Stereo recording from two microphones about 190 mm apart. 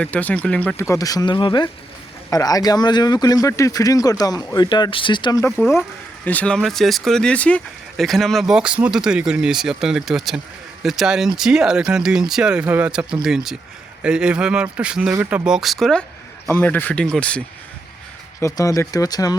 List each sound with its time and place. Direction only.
0.0 s speech: 10° left (ahead or behind)
6.2 s speech: 5° left (ahead or behind)
18.3 s speech: 15° left (ahead or behind)